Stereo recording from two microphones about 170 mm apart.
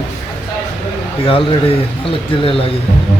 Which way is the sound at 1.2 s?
30° left (ahead or behind).